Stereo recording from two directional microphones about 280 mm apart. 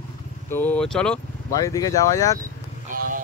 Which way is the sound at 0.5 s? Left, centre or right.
Centre.